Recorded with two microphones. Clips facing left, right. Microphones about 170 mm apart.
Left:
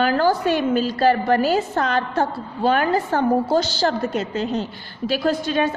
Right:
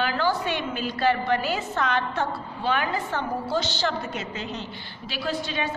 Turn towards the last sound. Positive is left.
turn(degrees=45)  # may be behind; listen again after turning